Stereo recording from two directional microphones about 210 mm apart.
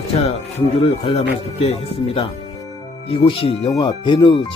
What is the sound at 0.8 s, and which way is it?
Speech, 30° left (ahead or behind).